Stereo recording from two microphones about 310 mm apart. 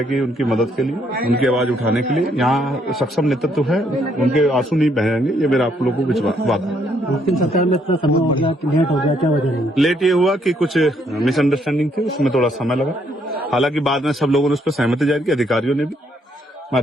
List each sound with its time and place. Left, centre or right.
0.1 s a man's voice: centre
1.1 s speech: right
1.4 s a man's voice: centre
7.4 s speech: left
7.9 s a man's voice: centre
9.0 s a man's voice: centre